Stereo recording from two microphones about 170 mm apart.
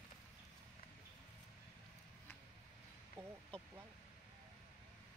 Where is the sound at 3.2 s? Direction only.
15° right (ahead or behind).